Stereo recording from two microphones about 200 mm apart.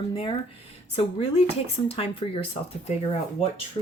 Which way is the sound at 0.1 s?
25° left (ahead or behind).